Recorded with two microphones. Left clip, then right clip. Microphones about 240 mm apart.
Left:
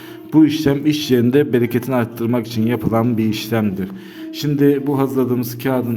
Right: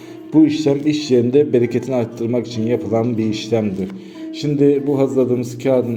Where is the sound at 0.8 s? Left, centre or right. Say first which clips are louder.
Even; left.